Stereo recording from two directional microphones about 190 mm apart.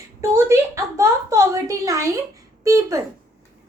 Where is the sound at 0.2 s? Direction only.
15° right (ahead or behind).